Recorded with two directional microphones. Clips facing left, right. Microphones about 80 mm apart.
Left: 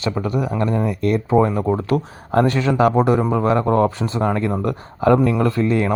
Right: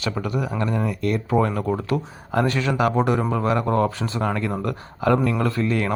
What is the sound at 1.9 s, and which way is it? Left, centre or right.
Speech, left.